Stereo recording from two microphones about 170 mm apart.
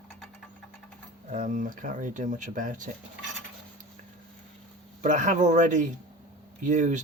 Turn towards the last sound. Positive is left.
turn(degrees=-45)  # may be behind; listen again after turning